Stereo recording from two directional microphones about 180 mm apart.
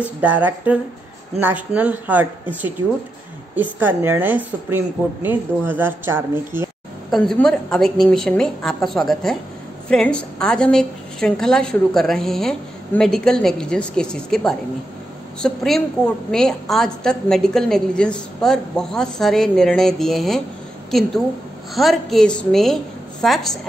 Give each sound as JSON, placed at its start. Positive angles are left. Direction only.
{"t": 0.0, "sound": "a woman's voice", "side_deg": -10}
{"t": 7.1, "sound": "a woman's voice", "side_deg": 0}
{"t": 21.7, "sound": "a woman's voice", "side_deg": 0}